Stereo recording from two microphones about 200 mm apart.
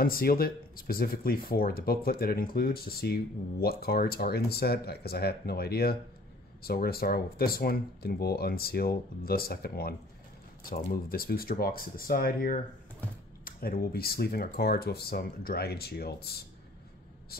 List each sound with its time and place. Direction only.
0.0 s speech: 50° left (ahead or behind)